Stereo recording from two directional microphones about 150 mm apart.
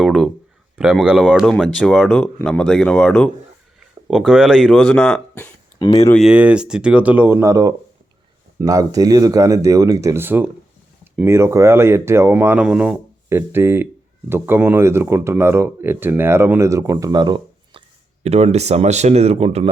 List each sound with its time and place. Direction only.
0.0 s speech: centre (ahead or behind)
6.1 s speech: 5° right (ahead or behind); by 19.7 s 45° right (ahead or behind)